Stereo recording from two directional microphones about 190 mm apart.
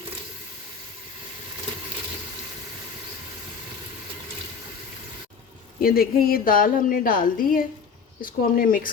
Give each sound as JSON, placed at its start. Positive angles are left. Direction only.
{"t": 5.8, "sound": "a woman's voice", "side_deg": 50}